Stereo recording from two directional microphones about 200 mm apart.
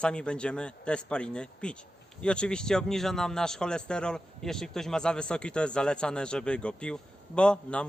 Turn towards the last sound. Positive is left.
turn(degrees=5)  # may be behind; listen again after turning